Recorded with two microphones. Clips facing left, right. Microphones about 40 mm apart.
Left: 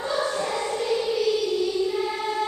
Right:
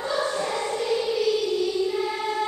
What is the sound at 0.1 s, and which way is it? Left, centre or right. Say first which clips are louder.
Choir: even; centre.